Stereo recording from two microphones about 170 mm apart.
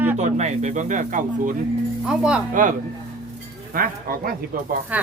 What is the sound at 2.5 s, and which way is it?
Speech, 50° right (ahead or behind).